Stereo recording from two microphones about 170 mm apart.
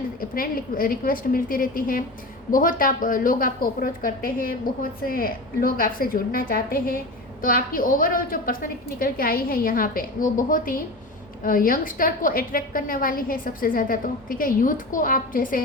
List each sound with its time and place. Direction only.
0.2 s a woman's voice: 55° left (ahead or behind)